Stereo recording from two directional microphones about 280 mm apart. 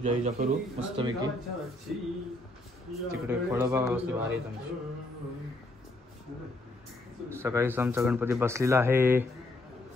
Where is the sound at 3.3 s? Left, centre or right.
Centre.